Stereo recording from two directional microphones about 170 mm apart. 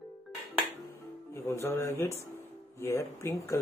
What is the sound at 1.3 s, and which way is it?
Speech, 15° left (ahead or behind).